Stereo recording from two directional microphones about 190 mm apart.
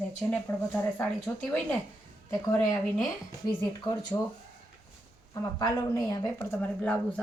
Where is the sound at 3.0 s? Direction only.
15° left (ahead or behind).